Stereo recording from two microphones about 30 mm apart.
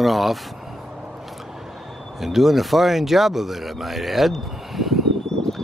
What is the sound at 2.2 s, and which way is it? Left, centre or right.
Speech, centre.